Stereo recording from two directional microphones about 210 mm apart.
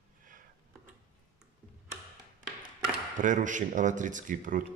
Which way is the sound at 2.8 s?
40° right (ahead or behind).